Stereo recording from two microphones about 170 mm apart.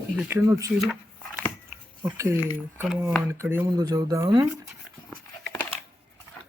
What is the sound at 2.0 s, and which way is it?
Speech, 15° right (ahead or behind).